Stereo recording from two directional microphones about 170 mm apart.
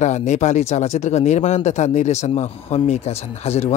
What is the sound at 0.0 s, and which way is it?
Speech, 45° left (ahead or behind).